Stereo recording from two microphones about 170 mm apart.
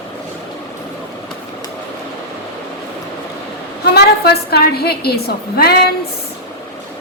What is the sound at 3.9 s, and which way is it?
A woman's voice, 70° left (ahead or behind).